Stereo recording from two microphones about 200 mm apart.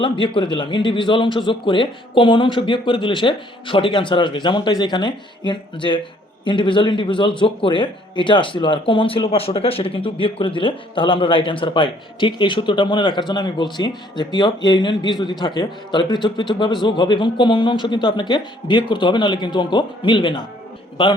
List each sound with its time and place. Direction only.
0.0 s a man's voice: 25° left (ahead or behind)